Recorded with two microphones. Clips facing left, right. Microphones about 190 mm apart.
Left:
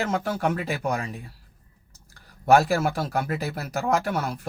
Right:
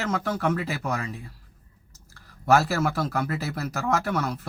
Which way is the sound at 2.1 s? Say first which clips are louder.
Left 3 dB; 15° left (ahead or behind).